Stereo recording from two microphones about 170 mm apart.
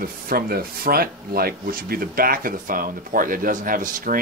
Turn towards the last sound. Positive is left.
turn(degrees=-55)  # may be behind; listen again after turning